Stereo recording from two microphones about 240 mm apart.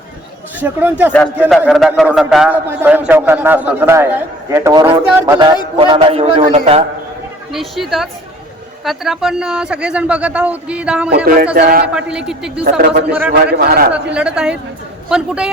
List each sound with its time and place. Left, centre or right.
0.6 s a man's voice: centre; by 6.8 s right
7.5 s speech: centre
11.5 s speech: right
11.9 s speech: centre
12.6 s speech: right
13.9 s speech: centre